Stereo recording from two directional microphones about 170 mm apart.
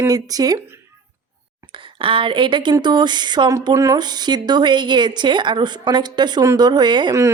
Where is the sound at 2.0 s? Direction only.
30° right (ahead or behind).